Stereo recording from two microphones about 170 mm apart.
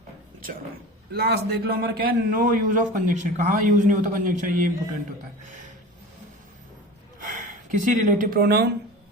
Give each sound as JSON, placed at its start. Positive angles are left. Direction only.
{"t": 1.1, "sound": "a man's voice", "side_deg": -65}
{"t": 7.3, "sound": "speech", "side_deg": -50}